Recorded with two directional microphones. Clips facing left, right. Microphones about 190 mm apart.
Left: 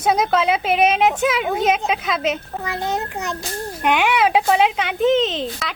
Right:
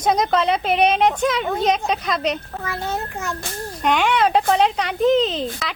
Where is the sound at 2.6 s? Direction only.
15° left (ahead or behind).